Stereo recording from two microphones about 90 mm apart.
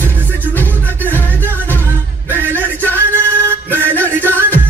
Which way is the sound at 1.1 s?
20° left (ahead or behind).